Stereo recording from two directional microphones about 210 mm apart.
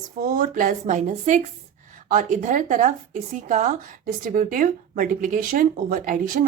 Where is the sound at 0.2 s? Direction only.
40° right (ahead or behind).